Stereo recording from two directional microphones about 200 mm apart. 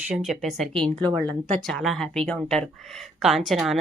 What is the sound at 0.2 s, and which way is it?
Speech, centre (ahead or behind).